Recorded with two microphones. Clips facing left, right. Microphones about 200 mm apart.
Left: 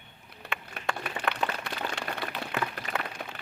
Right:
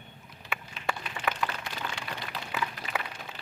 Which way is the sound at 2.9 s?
40° left (ahead or behind).